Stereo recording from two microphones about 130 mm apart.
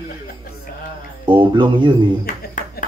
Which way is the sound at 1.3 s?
40° right (ahead or behind).